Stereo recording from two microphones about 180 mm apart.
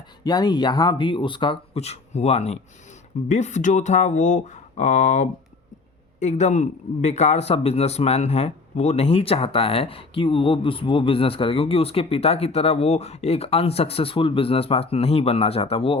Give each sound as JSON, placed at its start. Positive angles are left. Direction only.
{"t": 0.3, "sound": "a man's voice", "side_deg": 20}